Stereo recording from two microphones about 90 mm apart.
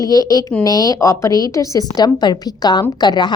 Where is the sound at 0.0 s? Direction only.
40° left (ahead or behind).